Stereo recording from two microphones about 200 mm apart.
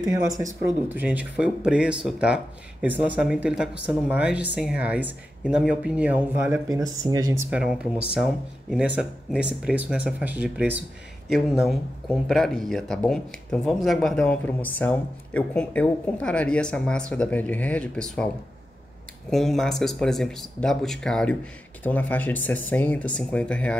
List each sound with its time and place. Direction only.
0.3 s speech: 15° right (ahead or behind)
6.7 s speech: 20° right (ahead or behind)
7.5 s speech: 5° right (ahead or behind)
19.3 s speech: centre (ahead or behind)